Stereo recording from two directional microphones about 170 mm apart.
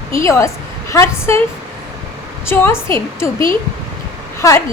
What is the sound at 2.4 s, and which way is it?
A woman's voice, 15° left (ahead or behind).